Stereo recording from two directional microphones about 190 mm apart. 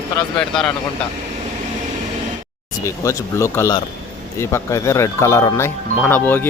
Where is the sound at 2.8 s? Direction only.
15° left (ahead or behind).